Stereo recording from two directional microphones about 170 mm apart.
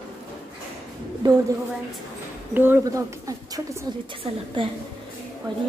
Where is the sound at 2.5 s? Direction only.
10° right (ahead or behind).